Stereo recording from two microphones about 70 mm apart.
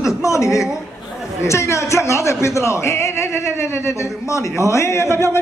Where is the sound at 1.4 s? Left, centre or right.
Left.